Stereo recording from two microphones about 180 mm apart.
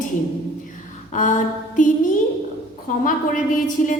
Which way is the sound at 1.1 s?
45° left (ahead or behind).